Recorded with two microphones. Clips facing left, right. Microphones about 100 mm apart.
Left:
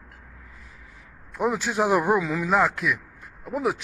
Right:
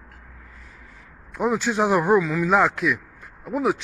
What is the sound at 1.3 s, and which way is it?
Speech, centre (ahead or behind).